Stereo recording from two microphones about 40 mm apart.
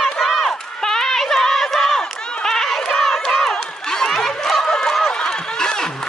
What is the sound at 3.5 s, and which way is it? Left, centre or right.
Crowd, centre.